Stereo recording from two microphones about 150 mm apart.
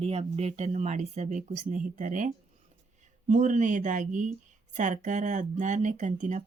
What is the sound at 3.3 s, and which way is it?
Speech, 55° right (ahead or behind).